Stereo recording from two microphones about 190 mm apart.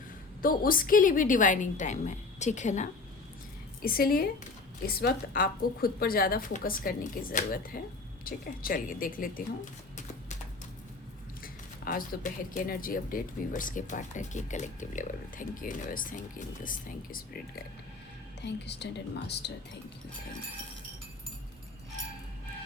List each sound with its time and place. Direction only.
0.4 s speech: 50° left (ahead or behind)
3.8 s speech: 50° left (ahead or behind)
11.4 s speech: 45° left (ahead or behind)
18.4 s speech: 65° left (ahead or behind)